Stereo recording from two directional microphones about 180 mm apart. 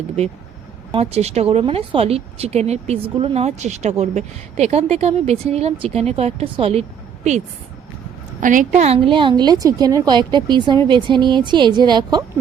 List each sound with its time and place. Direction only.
0.9 s speech: 35° right (ahead or behind)
8.4 s a woman's voice: 45° right (ahead or behind); by 12.2 s 25° right (ahead or behind)